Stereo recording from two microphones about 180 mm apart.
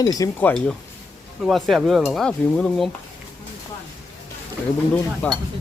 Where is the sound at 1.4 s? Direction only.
Centre (ahead or behind).